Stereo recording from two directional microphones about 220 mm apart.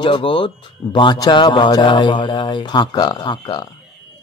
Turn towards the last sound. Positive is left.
turn(degrees=15)  # may be behind; listen again after turning